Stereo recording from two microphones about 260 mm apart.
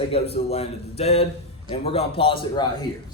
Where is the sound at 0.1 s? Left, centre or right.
Left.